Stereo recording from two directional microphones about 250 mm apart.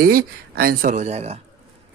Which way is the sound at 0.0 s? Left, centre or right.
Right.